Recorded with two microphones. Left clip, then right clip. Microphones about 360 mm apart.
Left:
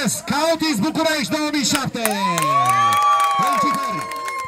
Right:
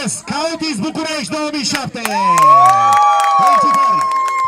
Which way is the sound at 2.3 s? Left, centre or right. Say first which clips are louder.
Right 10 dB; right.